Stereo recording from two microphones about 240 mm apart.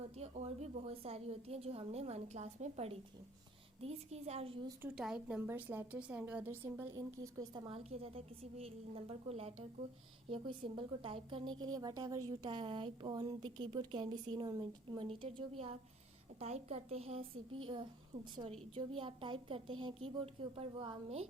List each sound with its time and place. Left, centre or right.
0.2 s a woman's voice: right
4.8 s a woman's voice: centre; by 17.6 s right
18.7 s a woman's voice: right